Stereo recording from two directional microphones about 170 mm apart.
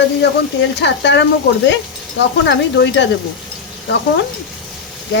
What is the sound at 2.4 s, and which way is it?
Stir, 90° left.